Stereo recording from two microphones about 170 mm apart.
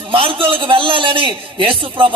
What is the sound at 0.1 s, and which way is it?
A man's voice, 30° right (ahead or behind).